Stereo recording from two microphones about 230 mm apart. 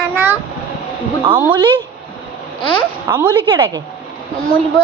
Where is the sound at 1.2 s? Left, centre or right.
Centre.